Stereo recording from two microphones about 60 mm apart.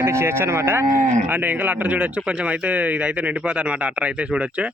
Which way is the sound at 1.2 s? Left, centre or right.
Right.